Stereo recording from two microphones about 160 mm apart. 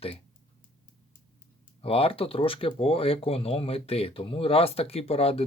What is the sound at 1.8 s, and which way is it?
Speech, 35° left (ahead or behind).